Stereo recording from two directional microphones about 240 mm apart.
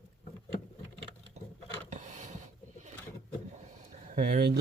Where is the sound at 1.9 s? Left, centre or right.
Right.